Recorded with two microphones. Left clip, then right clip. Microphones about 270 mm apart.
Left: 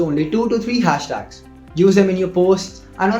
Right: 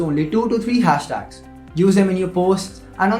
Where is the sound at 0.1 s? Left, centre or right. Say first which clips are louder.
Left 1 dB; right.